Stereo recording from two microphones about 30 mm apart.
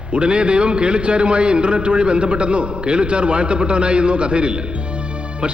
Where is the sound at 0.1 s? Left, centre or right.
Right.